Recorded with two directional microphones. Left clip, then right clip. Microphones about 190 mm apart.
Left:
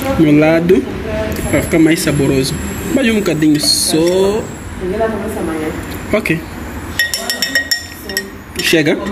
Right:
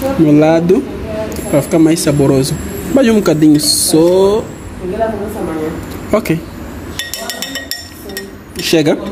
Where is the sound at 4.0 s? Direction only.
15° right (ahead or behind).